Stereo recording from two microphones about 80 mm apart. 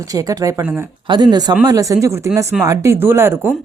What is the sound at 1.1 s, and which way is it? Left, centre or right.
Speech, right.